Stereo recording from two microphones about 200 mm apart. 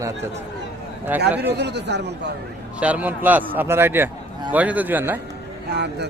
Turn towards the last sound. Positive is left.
turn(degrees=-55)  # may be behind; listen again after turning